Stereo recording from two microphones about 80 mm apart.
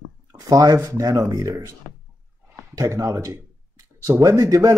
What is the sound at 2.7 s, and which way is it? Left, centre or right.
Speech, right.